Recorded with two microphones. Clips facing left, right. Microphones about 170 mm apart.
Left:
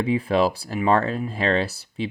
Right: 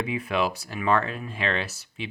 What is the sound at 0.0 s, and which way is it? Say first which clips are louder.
Speech: left 6 dB; 30° left (ahead or behind).